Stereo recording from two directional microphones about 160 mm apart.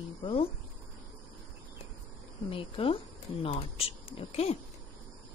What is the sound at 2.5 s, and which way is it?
Speech, 35° left (ahead or behind).